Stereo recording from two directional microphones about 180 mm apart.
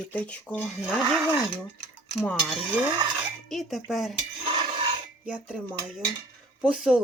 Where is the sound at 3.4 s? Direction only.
Centre (ahead or behind).